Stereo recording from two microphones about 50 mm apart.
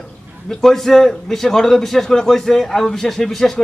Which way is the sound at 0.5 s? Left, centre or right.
Centre.